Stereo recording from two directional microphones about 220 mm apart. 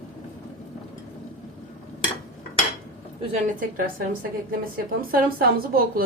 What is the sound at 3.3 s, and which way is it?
Speech, 40° right (ahead or behind).